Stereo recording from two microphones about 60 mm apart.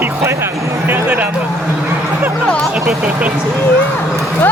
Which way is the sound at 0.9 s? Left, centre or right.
Right.